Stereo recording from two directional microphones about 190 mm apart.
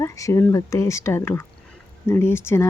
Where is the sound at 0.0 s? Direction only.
15° left (ahead or behind).